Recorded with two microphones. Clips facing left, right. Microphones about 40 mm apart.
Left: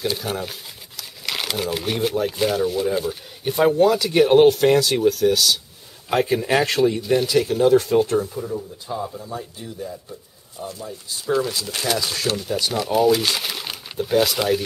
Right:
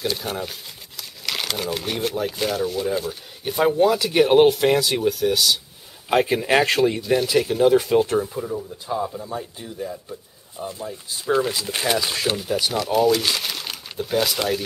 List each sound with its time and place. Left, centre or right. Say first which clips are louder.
0.0 s speech: left 1 dB; centre
6.0 s speech: right 1 dB; centre
12.7 s speech: left 2 dB; centre